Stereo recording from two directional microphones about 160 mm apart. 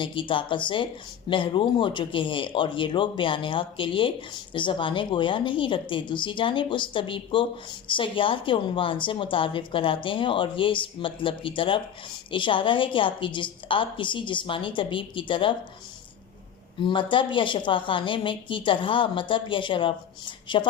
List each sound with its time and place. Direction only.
0.0 s a woman's voice: 30° left (ahead or behind)
16.8 s a woman's voice: 30° left (ahead or behind)